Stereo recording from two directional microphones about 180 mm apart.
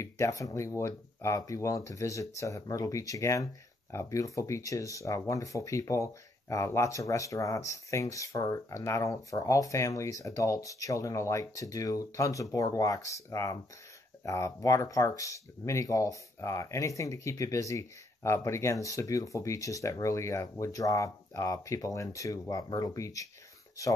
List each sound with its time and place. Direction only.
0.0 s speech: 15° left (ahead or behind)